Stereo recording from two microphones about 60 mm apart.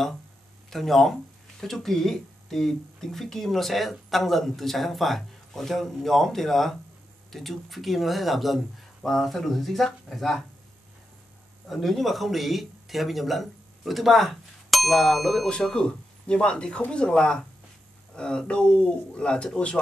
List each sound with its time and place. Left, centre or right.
0.7 s speech: centre
11.6 s speech: centre